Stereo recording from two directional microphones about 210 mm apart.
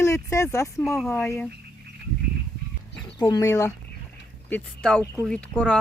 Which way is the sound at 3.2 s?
15° left (ahead or behind).